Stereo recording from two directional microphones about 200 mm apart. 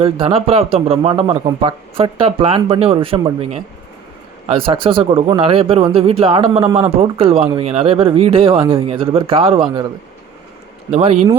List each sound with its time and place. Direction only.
0.0 s speech: 30° right (ahead or behind)
10.9 s speech: 30° right (ahead or behind)